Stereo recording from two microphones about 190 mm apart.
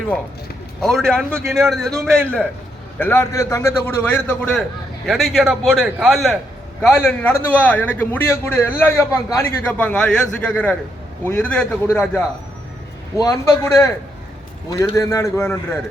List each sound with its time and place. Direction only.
0.8 s a man's voice: centre (ahead or behind)
7.0 s a man's voice: 10° left (ahead or behind)
14.9 s a man's voice: 15° left (ahead or behind)